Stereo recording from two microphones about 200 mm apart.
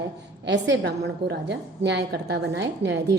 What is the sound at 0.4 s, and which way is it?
A woman's voice, 60° right (ahead or behind).